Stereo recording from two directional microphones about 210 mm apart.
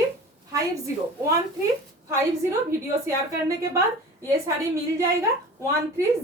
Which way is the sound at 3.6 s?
15° right (ahead or behind).